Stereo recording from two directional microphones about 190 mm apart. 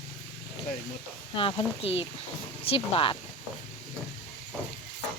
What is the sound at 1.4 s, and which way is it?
Speech, 30° left (ahead or behind).